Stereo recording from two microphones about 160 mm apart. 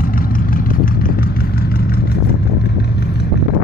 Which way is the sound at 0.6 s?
65° left (ahead or behind).